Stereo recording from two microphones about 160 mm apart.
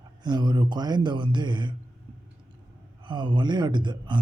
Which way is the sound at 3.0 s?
30° right (ahead or behind).